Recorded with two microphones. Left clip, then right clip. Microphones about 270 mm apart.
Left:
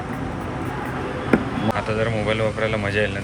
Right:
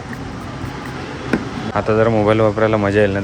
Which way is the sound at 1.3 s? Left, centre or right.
Right.